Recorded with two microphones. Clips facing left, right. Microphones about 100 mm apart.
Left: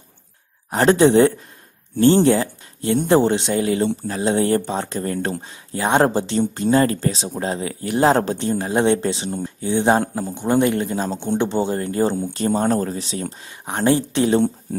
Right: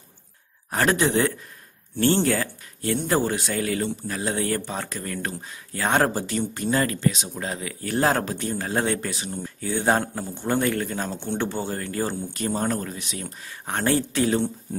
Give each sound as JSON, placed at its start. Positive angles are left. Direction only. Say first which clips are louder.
{"t": 0.7, "sound": "speech", "louder": "left 8 dB", "side_deg": 25}
{"t": 7.8, "sound": "speech", "louder": "left 6 dB", "side_deg": 20}
{"t": 13.4, "sound": "speech", "louder": "left 3 dB", "side_deg": 20}